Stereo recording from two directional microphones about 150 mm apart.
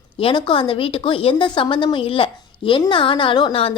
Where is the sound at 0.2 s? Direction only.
35° left (ahead or behind).